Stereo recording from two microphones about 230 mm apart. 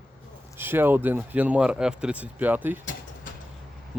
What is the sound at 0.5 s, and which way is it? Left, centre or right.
Speech, centre.